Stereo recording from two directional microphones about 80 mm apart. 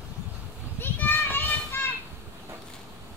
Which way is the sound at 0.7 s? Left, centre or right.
Left.